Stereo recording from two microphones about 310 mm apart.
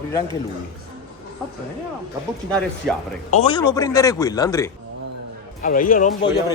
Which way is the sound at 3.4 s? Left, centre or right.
Centre.